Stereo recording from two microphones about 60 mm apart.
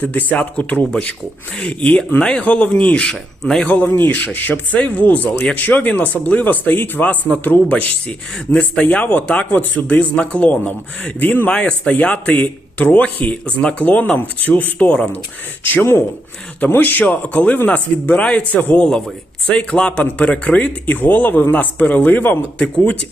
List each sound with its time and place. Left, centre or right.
0.0 s speech: left
3.7 s speech: left
11.5 s speech: centre
15.6 s speech: left
16.6 s speech: left
22.5 s speech: centre